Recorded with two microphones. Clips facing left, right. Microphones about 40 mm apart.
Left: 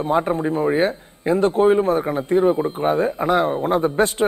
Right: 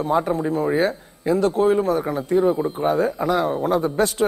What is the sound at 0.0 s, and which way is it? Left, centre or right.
A man's voice, left.